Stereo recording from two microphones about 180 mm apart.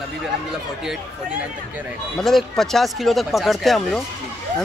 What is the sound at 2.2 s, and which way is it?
Speech, centre (ahead or behind).